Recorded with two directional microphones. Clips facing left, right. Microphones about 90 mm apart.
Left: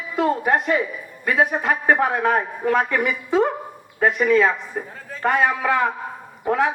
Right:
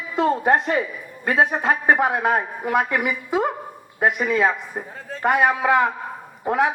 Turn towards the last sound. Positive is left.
turn(degrees=-20)  # may be behind; listen again after turning